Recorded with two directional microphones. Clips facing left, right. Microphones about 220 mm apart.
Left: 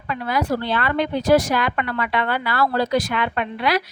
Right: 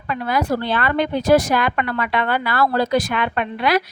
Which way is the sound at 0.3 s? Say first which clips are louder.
Right 1 dB; 50° right (ahead or behind).